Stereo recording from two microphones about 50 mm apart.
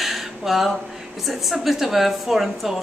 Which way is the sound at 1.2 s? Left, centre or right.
Centre.